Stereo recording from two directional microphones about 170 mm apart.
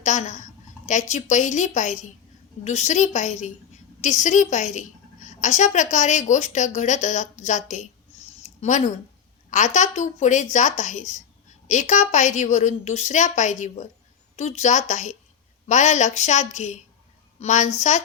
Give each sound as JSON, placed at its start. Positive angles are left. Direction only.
{"t": 0.0, "sound": "a woman's voice", "side_deg": 45}
{"t": 8.4, "sound": "a sound", "side_deg": 45}
{"t": 9.5, "sound": "a woman's voice", "side_deg": 45}